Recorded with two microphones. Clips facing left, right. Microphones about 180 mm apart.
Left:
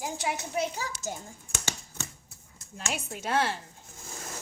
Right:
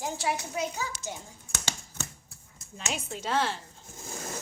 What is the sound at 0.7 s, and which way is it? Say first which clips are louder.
Speech: even; 45° left (ahead or behind).